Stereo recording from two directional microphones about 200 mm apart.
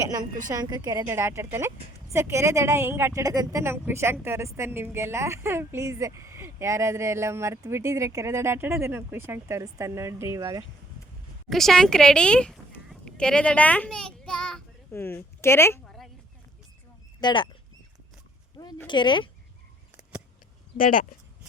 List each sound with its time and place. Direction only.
0.5 s a woman's voice: 20° right (ahead or behind)
11.4 s speech: centre (ahead or behind)
17.2 s speech: 25° left (ahead or behind)
18.9 s speech: 25° left (ahead or behind)
20.7 s speech: 45° left (ahead or behind)